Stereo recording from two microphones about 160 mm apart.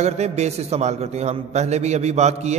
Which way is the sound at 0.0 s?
45° right (ahead or behind).